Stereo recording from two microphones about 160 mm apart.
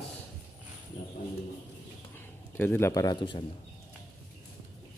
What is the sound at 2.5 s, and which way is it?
Speech, 15° left (ahead or behind).